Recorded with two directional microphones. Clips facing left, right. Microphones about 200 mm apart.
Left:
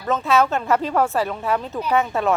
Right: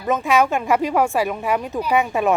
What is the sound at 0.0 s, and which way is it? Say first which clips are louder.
Speech: right 1 dB; 15° right (ahead or behind).